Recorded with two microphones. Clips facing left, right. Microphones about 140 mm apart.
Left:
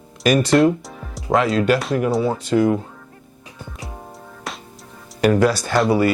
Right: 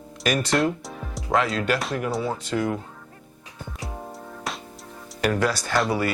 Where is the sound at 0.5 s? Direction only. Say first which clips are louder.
Left 8 dB; centre (ahead or behind).